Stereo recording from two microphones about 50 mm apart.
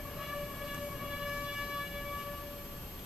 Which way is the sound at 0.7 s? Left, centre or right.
Centre.